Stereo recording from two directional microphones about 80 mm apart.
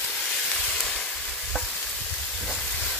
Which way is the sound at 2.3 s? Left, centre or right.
Centre.